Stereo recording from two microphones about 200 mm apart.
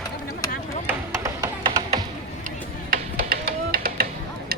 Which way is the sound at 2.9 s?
45° right (ahead or behind).